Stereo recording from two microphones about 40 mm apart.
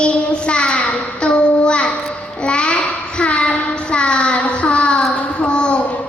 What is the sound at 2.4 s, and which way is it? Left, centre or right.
Music, left.